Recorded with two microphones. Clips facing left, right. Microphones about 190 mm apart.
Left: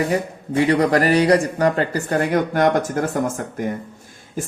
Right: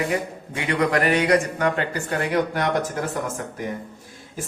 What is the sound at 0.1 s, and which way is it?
A man's voice, 35° left (ahead or behind).